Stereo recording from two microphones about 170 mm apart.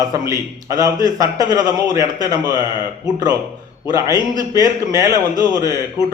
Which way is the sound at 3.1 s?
20° right (ahead or behind).